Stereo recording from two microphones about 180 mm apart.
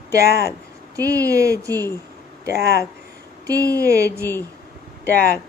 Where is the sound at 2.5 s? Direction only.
60° left (ahead or behind).